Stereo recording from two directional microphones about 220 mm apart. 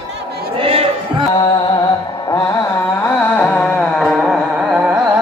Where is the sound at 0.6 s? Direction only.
25° right (ahead or behind).